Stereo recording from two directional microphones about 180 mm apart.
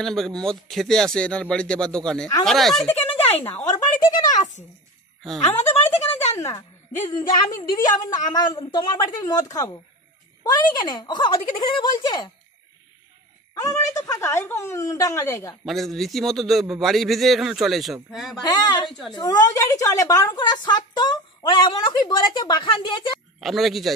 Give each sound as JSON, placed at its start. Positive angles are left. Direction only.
{"t": 0.0, "sound": "a man's voice", "side_deg": 0}
{"t": 3.7, "sound": "a sound", "side_deg": 20}
{"t": 5.2, "sound": "a man's voice", "side_deg": 0}
{"t": 6.3, "sound": "a woman's voice", "side_deg": 15}
{"t": 13.6, "sound": "a woman's voice", "side_deg": 20}
{"t": 15.6, "sound": "a man's voice", "side_deg": 0}
{"t": 18.3, "sound": "a woman's voice", "side_deg": 20}
{"t": 23.4, "sound": "a man's voice", "side_deg": 0}